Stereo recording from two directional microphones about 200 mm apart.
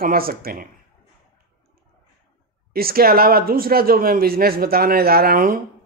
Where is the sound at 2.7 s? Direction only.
50° right (ahead or behind).